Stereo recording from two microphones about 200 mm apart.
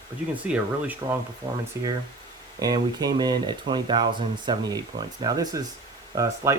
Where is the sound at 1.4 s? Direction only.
20° right (ahead or behind).